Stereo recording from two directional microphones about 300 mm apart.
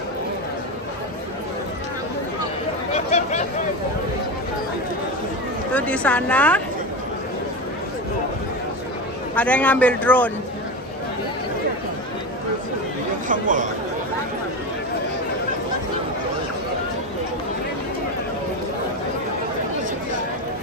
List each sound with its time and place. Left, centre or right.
2.9 s a sound: left
5.7 s a man's voice: centre
9.3 s a man's voice: centre
13.3 s speech: right